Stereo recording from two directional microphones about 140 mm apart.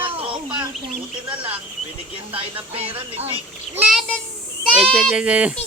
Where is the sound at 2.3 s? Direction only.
40° right (ahead or behind).